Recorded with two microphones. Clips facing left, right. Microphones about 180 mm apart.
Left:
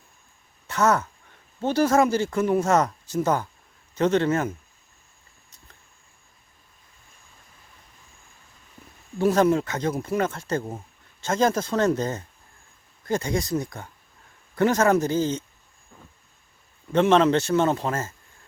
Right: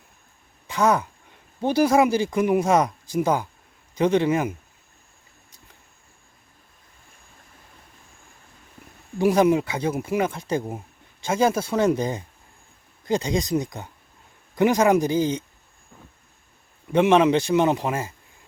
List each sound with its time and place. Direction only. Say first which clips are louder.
0.7 s speech: right 1 dB; 15° right (ahead or behind)
9.1 s speech: right 1 dB; 10° right (ahead or behind)
16.9 s speech: right 1 dB; 10° right (ahead or behind)